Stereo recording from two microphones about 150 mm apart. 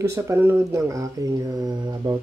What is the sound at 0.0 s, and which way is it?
Speech, 20° right (ahead or behind).